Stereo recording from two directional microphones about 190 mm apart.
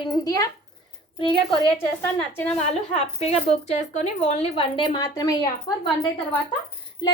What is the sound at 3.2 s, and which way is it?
Speech, 35° left (ahead or behind).